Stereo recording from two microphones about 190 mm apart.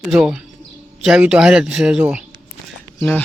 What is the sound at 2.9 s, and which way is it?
Speech, 10° left (ahead or behind).